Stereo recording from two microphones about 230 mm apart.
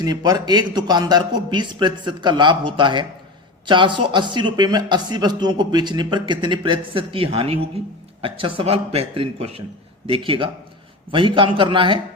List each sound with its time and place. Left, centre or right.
0.0 s a man's voice: centre